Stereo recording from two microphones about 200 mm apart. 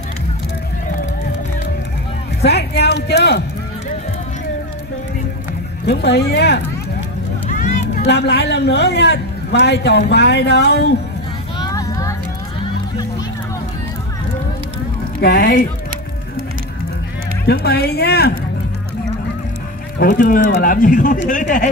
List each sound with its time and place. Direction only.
2.4 s speech: 55° left (ahead or behind)
5.9 s speech: 55° left (ahead or behind)
7.4 s speech: 40° left (ahead or behind)
11.5 s a sound: 20° left (ahead or behind)
15.1 s speech: 55° left (ahead or behind)
17.5 s speech: 55° left (ahead or behind)
20.0 s speech: 45° left (ahead or behind)